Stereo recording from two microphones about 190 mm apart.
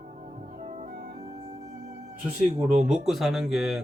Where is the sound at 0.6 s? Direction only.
40° right (ahead or behind).